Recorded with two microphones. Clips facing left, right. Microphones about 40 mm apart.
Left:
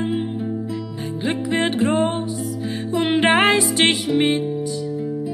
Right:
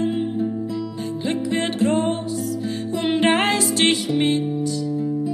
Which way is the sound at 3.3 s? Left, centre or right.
Left.